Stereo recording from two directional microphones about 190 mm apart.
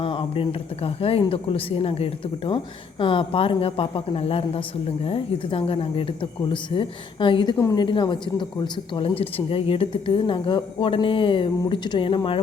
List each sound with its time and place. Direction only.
0.0 s a woman's voice: 25° left (ahead or behind)